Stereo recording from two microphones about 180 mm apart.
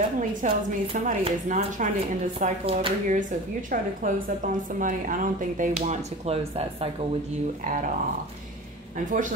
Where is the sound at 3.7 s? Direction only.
50° right (ahead or behind).